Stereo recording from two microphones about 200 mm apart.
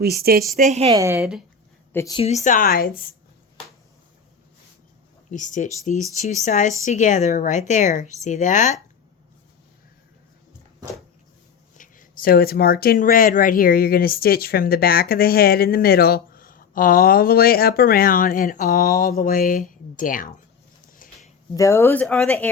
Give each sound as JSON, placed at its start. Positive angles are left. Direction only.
{"t": 0.0, "sound": "a woman's voice", "side_deg": -50}
{"t": 0.5, "sound": "a woman's voice", "side_deg": -35}
{"t": 0.9, "sound": "a woman's voice", "side_deg": -15}
{"t": 1.9, "sound": "speech", "side_deg": 15}
{"t": 2.1, "sound": "speech", "side_deg": 35}
{"t": 5.3, "sound": "a woman's voice", "side_deg": 40}
{"t": 11.8, "sound": "speech", "side_deg": 45}
{"t": 21.0, "sound": "a sound", "side_deg": 45}
{"t": 21.5, "sound": "speech", "side_deg": 15}